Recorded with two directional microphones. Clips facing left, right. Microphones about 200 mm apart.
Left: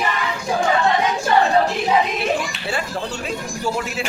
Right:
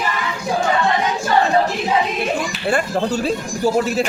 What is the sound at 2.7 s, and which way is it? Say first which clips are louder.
Speech: right 9 dB; 50° right (ahead or behind).